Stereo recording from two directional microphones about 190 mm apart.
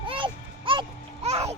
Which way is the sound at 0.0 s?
25° right (ahead or behind).